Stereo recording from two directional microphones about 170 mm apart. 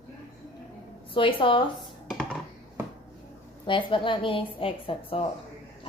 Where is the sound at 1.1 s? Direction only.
30° left (ahead or behind).